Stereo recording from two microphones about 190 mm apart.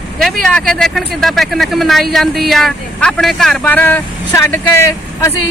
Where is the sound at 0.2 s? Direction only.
Centre (ahead or behind).